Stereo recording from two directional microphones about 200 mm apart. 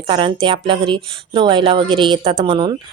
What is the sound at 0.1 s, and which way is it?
Speech, 25° right (ahead or behind).